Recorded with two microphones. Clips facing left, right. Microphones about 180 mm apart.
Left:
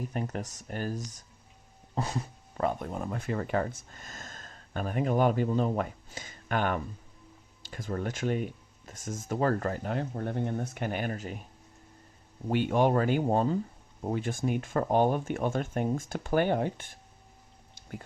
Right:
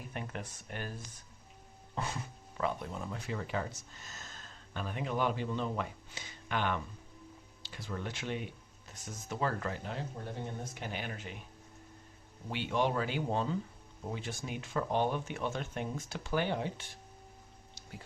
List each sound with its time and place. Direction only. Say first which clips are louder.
0.1 s speech: left 7 dB; 40° left (ahead or behind)
12.5 s speech: left 7 dB; 50° left (ahead or behind)